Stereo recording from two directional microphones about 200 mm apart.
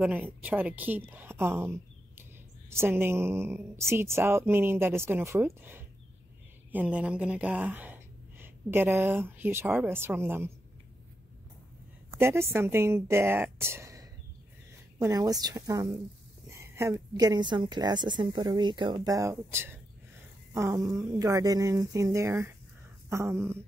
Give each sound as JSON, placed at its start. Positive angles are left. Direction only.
{"t": 0.0, "sound": "a woman's voice", "side_deg": -10}
{"t": 12.2, "sound": "a woman's voice", "side_deg": -10}